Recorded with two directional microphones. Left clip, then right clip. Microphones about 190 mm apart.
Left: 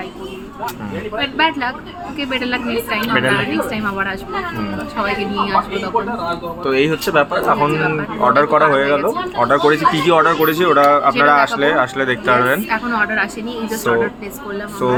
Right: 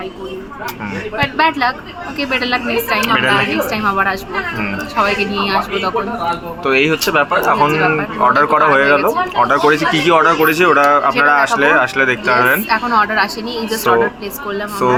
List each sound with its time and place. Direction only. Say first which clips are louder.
1.1 s speech: right 2 dB; 10° left (ahead or behind)
6.7 s speech: right 3 dB; 25° left (ahead or behind)